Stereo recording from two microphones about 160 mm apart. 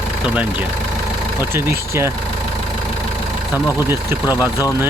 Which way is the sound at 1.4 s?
15° right (ahead or behind).